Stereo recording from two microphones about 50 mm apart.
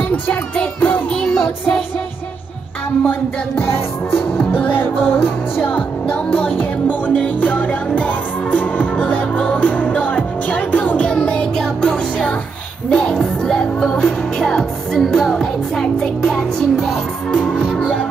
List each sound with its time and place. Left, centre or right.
0.7 s music: left
1.2 s child singing: centre
3.6 s music: left
4.4 s music: left
6.0 s music: left; by 16.8 s centre
17.5 s music: centre